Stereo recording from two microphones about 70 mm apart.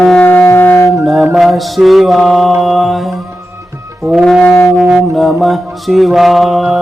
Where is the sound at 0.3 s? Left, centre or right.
Left.